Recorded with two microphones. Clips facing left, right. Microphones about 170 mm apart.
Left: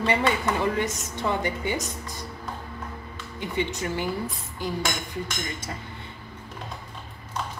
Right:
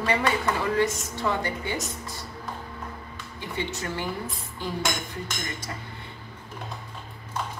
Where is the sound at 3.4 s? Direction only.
15° left (ahead or behind).